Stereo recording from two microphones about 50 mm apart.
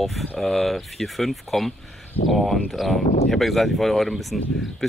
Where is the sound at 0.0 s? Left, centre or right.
Centre.